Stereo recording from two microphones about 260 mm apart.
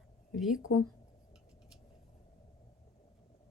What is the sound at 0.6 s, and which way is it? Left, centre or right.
Speech, left.